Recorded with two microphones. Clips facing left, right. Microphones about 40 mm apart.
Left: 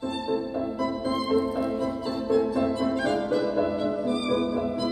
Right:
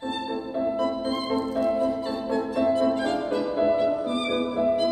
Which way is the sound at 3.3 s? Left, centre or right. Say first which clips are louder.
Right 2 dB; right.